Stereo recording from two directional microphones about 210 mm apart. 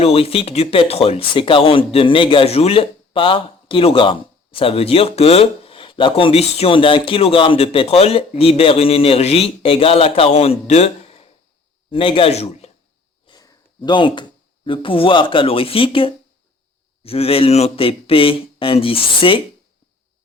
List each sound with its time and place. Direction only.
0.0 s a man's voice: 25° left (ahead or behind)
13.2 s speech: 15° left (ahead or behind)